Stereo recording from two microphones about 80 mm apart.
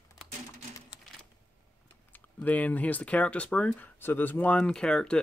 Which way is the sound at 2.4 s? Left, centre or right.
Centre.